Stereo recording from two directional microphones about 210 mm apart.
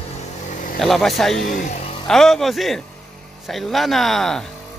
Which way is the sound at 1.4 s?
35° left (ahead or behind).